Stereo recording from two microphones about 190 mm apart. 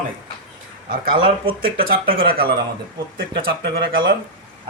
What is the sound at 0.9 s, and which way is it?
Speech, 50° right (ahead or behind).